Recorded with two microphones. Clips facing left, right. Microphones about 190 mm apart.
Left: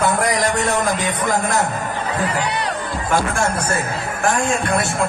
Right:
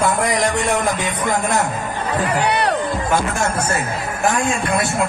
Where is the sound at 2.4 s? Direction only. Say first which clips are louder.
Right 5 dB; 65° right (ahead or behind).